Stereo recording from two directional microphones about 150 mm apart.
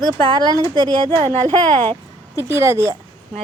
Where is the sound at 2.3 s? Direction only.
20° right (ahead or behind).